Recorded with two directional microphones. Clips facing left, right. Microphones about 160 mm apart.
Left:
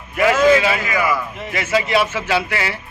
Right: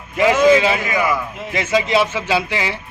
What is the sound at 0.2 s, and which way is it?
Speech, 20° right (ahead or behind).